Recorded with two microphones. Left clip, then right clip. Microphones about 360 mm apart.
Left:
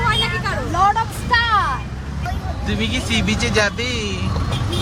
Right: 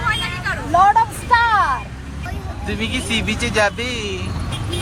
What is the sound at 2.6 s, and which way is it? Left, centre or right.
Speech, centre.